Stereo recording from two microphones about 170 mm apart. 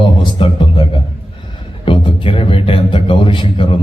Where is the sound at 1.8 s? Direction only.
30° left (ahead or behind).